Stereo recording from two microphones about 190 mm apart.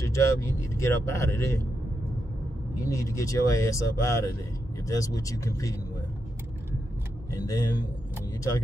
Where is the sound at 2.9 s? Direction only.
15° left (ahead or behind).